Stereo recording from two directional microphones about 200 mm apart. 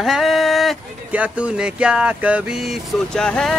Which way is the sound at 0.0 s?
Centre (ahead or behind).